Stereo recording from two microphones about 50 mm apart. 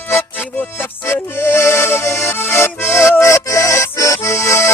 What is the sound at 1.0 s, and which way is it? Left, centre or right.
Accordion, left.